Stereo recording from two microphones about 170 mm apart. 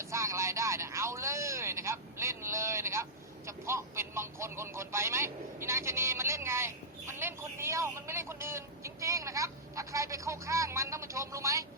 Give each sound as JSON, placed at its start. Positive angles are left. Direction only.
{"t": 0.0, "sound": "speech", "side_deg": -15}